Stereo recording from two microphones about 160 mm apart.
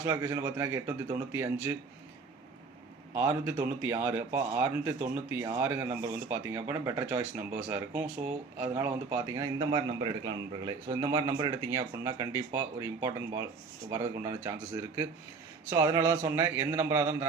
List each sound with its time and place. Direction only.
0.0 s speech: 20° right (ahead or behind)
3.2 s speech: 15° right (ahead or behind)
9.6 s a man's voice: 30° right (ahead or behind)
15.7 s speech: 20° right (ahead or behind)